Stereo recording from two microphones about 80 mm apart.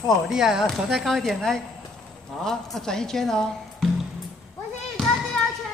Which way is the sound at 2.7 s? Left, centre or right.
Centre.